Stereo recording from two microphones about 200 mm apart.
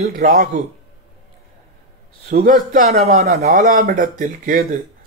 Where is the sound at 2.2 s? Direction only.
45° right (ahead or behind).